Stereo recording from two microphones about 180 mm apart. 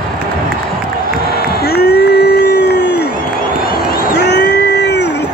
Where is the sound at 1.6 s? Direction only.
60° left (ahead or behind).